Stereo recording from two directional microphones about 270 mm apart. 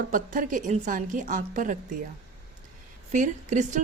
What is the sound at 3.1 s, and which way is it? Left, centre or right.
Speech, right.